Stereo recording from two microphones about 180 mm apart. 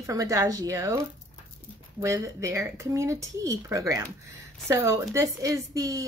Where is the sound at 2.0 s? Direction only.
15° right (ahead or behind).